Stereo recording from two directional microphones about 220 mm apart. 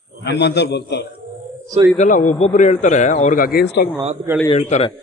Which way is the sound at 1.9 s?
35° left (ahead or behind).